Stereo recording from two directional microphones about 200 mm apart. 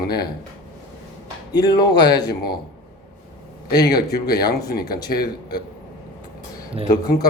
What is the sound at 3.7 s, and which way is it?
Speech, 20° left (ahead or behind).